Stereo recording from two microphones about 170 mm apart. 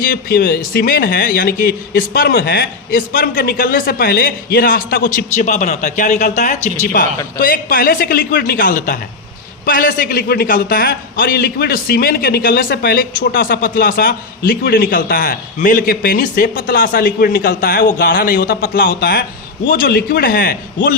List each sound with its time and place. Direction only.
0.0 s a man's voice: 60° left (ahead or behind)